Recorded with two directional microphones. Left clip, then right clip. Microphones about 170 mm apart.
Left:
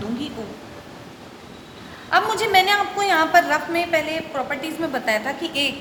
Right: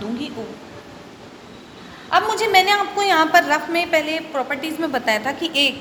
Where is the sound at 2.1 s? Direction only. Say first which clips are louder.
Right 1 dB; 15° right (ahead or behind).